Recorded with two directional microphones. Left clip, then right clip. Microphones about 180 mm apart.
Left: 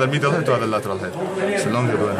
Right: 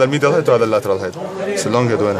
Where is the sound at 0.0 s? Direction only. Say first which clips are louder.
Right 6 dB; 55° right (ahead or behind).